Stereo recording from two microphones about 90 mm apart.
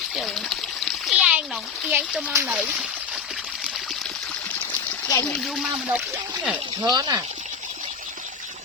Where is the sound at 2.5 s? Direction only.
15° right (ahead or behind).